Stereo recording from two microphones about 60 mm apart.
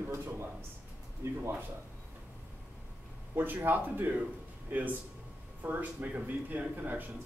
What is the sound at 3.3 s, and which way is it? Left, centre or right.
A man's voice, right.